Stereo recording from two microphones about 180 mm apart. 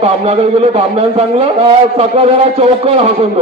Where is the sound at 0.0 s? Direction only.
35° right (ahead or behind).